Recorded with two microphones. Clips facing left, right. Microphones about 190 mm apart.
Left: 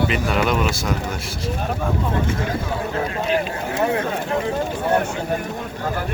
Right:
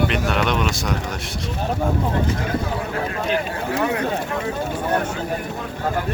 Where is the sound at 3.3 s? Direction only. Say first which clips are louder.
Left 1 dB; 25° left (ahead or behind).